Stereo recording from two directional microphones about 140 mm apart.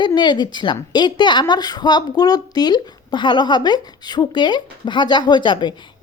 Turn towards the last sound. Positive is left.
turn(degrees=35)  # may be behind; listen again after turning